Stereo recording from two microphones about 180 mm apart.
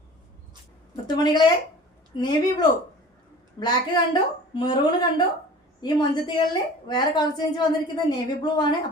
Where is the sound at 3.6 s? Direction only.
25° left (ahead or behind).